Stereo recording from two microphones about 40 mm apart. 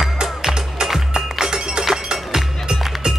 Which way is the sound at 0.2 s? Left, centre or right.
Centre.